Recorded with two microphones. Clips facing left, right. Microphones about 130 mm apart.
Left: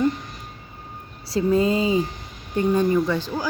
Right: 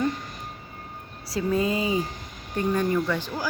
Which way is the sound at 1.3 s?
30° left (ahead or behind).